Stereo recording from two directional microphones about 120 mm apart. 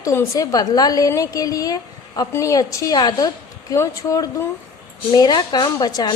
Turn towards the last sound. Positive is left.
turn(degrees=30)  # may be behind; listen again after turning